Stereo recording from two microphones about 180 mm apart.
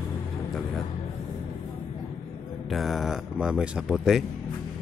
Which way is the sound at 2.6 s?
Centre (ahead or behind).